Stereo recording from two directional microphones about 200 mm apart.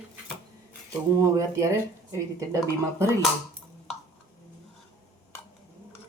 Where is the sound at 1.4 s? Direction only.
15° right (ahead or behind).